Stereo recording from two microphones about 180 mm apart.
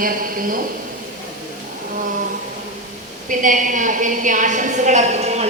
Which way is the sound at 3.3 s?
45° right (ahead or behind).